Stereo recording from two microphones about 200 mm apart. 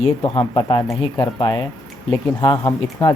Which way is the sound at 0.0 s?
30° left (ahead or behind).